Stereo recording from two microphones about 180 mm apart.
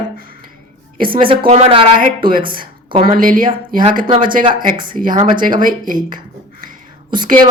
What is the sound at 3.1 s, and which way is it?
Speech, 50° right (ahead or behind).